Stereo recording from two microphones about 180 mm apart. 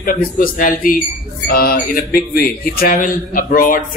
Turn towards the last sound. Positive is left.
turn(degrees=50)  # may be behind; listen again after turning